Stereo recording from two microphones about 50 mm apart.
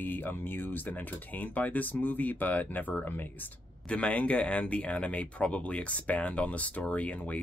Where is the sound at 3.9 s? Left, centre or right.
Left.